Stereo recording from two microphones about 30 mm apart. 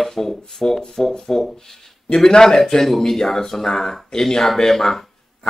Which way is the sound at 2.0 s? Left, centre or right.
Left.